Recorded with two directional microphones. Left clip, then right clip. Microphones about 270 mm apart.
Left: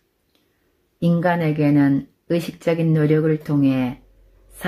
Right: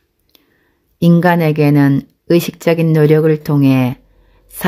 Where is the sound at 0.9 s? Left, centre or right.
Right.